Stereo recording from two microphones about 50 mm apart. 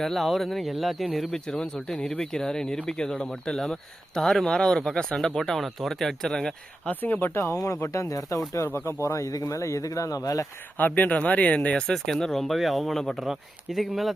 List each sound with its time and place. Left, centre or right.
0.0 s speech: centre
1.3 s speech: centre
7.0 s speech: left
7.3 s speech: left
8.7 s speech: left
10.8 s speech: left; by 11.9 s centre
12.0 s speech: centre
13.1 s speech: centre